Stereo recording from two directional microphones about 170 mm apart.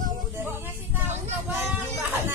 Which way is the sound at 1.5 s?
10° right (ahead or behind).